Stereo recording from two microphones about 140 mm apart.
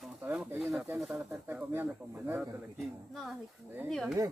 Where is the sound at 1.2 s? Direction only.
15° right (ahead or behind).